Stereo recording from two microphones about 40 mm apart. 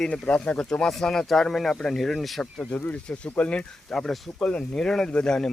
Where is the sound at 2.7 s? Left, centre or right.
Left.